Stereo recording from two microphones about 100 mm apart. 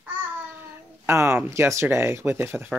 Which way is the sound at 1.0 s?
25° right (ahead or behind).